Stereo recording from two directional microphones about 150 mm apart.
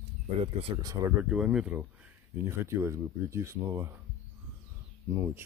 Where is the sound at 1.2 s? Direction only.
5° right (ahead or behind).